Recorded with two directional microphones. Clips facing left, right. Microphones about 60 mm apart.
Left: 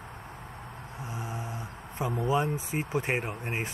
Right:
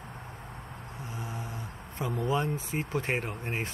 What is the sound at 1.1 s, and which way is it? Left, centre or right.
Speech, left.